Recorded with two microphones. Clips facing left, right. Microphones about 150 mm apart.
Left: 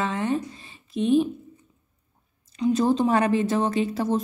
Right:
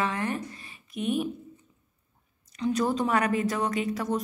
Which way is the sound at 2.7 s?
25° left (ahead or behind).